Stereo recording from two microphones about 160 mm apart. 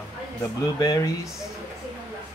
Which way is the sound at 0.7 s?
25° left (ahead or behind).